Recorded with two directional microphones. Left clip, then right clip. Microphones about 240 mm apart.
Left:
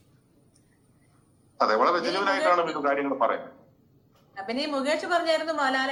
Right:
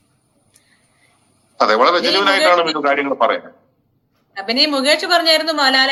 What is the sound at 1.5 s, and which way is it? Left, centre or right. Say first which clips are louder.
A man's voice: right 9 dB; right.